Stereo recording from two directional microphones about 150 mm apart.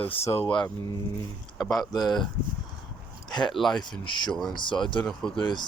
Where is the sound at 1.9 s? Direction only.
25° left (ahead or behind).